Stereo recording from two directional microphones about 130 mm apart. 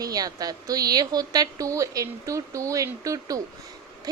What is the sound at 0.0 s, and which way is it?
A woman's voice, 30° right (ahead or behind).